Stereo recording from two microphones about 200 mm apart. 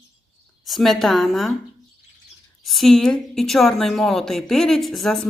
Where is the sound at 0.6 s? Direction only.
Centre (ahead or behind).